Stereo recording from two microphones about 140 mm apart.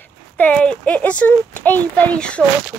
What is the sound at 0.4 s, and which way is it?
Speech, 10° left (ahead or behind).